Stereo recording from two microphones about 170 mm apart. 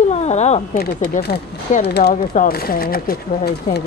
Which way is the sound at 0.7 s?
65° left (ahead or behind).